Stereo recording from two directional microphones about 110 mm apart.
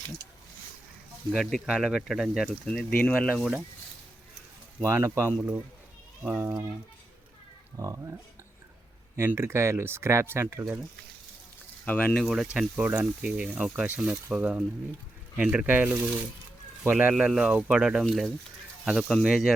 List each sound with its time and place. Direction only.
1.3 s speech: 5° left (ahead or behind)
2.6 s speech: 10° left (ahead or behind)
4.8 s speech: 25° right (ahead or behind)
7.8 s speech: 30° right (ahead or behind)
9.1 s speech: 25° right (ahead or behind)
11.9 s speech: 15° left (ahead or behind)
12.2 s speech: 5° right (ahead or behind)
12.5 s speech: 15° right (ahead or behind)
17.2 s speech: 5° right (ahead or behind)